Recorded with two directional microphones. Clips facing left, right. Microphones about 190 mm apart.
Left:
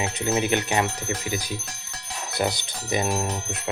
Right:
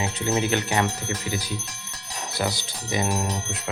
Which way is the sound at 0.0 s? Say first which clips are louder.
Even; 15° left (ahead or behind).